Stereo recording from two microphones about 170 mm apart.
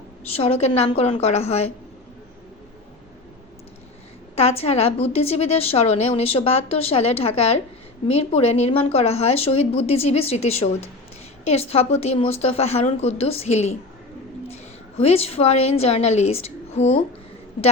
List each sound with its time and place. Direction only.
0.3 s a woman's voice: 35° left (ahead or behind)
4.4 s a woman's voice: 35° left (ahead or behind)